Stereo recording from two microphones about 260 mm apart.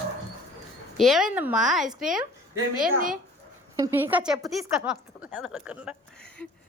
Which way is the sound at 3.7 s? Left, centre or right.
Centre.